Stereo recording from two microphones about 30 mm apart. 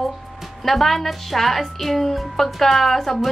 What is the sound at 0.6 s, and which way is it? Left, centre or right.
Speech, centre.